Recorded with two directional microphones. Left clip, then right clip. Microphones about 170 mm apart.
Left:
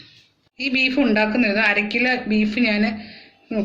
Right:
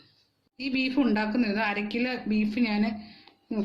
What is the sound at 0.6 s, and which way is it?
Speech, 55° right (ahead or behind).